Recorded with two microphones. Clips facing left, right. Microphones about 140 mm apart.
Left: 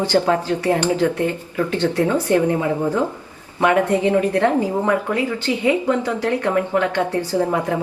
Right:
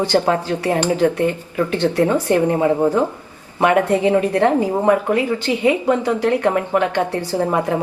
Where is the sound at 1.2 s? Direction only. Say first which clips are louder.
Right 2 dB; 15° right (ahead or behind).